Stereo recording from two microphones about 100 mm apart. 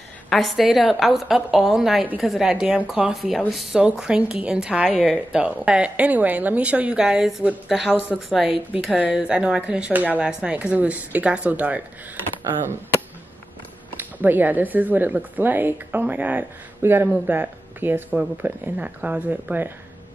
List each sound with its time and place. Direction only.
0.3 s a woman's voice: centre (ahead or behind)
8.7 s a woman's voice: 15° right (ahead or behind)
13.9 s speech: 20° right (ahead or behind)